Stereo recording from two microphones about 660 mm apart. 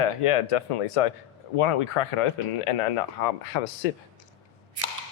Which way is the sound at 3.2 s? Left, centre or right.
Left.